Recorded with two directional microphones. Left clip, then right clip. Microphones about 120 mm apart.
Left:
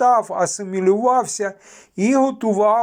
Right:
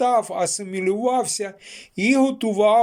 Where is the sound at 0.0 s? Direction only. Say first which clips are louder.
Left 4 dB; 35° right (ahead or behind).